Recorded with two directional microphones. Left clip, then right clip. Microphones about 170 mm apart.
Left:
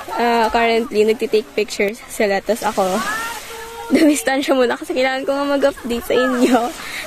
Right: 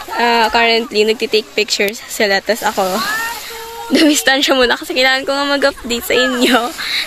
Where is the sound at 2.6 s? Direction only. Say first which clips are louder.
Right 2 dB; 5° right (ahead or behind).